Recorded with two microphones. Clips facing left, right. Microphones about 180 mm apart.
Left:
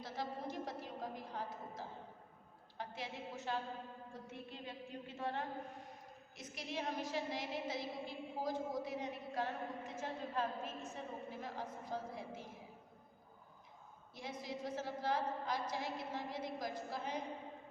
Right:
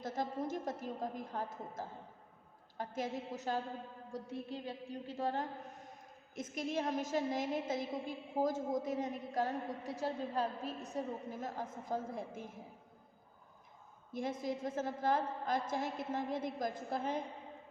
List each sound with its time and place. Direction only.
0.0 s a sound: 45° right (ahead or behind)
2.7 s a woman's voice: 45° right (ahead or behind)
14.1 s a woman's voice: 50° right (ahead or behind)